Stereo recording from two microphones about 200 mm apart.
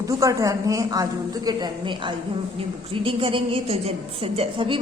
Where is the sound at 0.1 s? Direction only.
15° right (ahead or behind).